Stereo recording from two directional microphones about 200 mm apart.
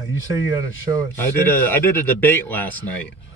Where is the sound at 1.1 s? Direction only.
10° left (ahead or behind).